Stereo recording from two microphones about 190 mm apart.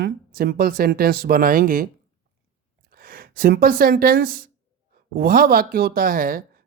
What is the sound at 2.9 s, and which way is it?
Speech, 50° right (ahead or behind).